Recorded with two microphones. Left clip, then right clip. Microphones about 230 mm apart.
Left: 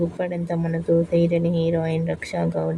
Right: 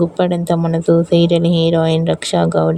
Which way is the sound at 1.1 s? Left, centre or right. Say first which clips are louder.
Right 7 dB; right.